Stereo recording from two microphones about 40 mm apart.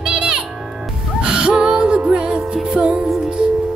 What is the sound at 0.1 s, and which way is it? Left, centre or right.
Music, right.